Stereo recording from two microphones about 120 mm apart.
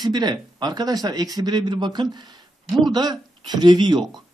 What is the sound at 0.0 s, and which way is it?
Speech, 35° right (ahead or behind).